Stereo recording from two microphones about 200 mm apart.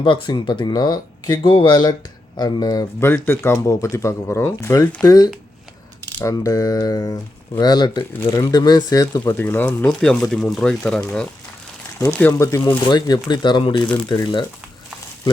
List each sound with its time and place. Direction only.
0.0 s speech: 25° left (ahead or behind)